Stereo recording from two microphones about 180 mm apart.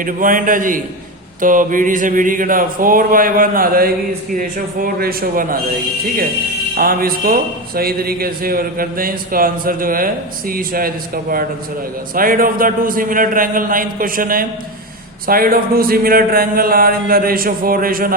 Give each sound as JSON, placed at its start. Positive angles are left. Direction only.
{"t": 0.0, "sound": "a man's voice", "side_deg": -50}
{"t": 6.7, "sound": "a man's voice", "side_deg": -55}